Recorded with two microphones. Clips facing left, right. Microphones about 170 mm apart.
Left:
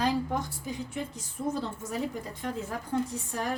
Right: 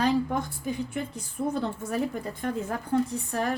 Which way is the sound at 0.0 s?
55° right (ahead or behind).